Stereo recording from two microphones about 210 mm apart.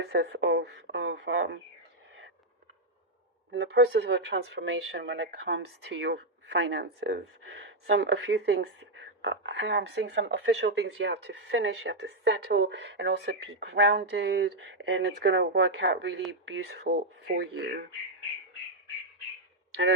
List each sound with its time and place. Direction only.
0.0 s speech: 55° right (ahead or behind)
3.5 s speech: 55° right (ahead or behind)